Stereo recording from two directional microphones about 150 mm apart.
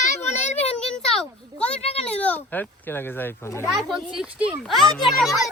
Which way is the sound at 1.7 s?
40° left (ahead or behind).